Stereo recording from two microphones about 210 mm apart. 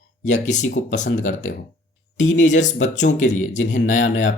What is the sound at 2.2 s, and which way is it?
Speech, 60° left (ahead or behind).